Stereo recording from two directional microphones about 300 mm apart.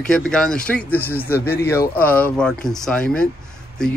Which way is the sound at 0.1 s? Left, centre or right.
Centre.